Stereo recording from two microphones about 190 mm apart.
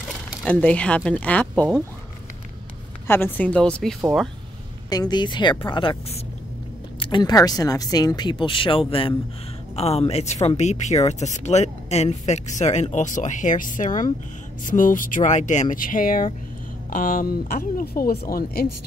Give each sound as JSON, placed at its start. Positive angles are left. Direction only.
{"t": 0.3, "sound": "speech", "side_deg": 5}
{"t": 3.1, "sound": "speech", "side_deg": 10}
{"t": 4.8, "sound": "speech", "side_deg": 20}